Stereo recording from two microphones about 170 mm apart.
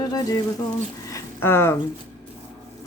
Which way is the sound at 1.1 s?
15° left (ahead or behind).